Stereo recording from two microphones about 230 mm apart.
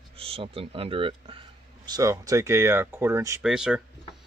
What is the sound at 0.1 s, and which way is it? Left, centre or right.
Speech, right.